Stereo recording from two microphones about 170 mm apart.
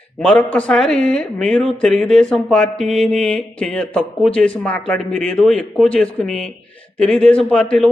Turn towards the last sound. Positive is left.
turn(degrees=5)  # may be behind; listen again after turning